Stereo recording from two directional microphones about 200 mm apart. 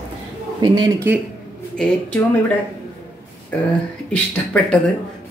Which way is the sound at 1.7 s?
5° left (ahead or behind).